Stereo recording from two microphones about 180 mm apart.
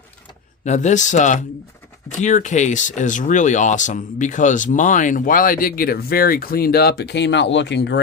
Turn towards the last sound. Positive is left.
turn(degrees=75)  # may be behind; listen again after turning